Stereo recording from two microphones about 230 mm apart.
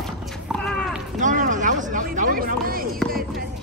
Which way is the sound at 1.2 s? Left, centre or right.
Right.